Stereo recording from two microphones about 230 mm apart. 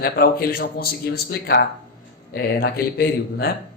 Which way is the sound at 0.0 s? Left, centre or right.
Left.